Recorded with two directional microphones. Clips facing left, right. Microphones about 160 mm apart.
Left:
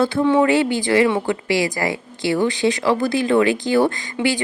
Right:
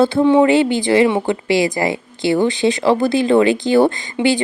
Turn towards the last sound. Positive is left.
turn(degrees=-25)  # may be behind; listen again after turning